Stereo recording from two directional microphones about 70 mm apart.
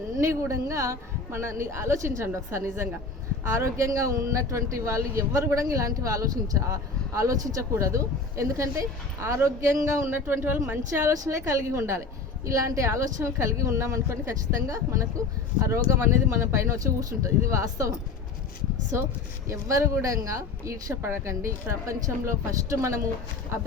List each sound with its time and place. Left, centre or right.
0.2 s speech: right
11.1 s speech: right
19.5 s speech: right